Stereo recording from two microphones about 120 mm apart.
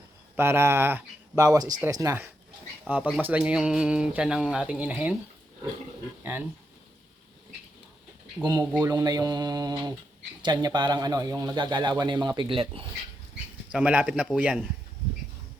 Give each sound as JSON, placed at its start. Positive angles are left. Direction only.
{"t": 0.3, "sound": "speech", "side_deg": -20}
{"t": 1.5, "sound": "a man's voice", "side_deg": -30}
{"t": 2.8, "sound": "speech", "side_deg": -10}
{"t": 8.4, "sound": "a man's voice", "side_deg": -35}
{"t": 13.7, "sound": "speech", "side_deg": -10}